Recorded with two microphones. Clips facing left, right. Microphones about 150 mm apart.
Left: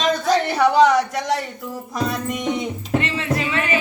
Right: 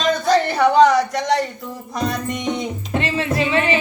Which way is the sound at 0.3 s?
Centre (ahead or behind).